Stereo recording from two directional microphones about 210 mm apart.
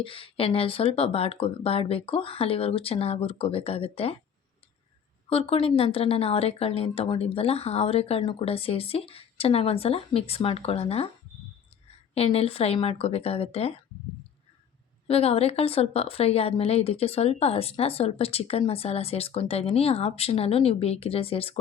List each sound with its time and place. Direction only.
0.0 s a woman's voice: 25° left (ahead or behind)
5.3 s a woman's voice: 25° left (ahead or behind)
12.1 s a woman's voice: 30° left (ahead or behind)
15.0 s a woman's voice: 30° left (ahead or behind)